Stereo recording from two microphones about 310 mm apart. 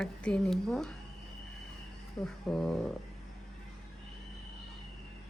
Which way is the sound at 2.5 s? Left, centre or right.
Centre.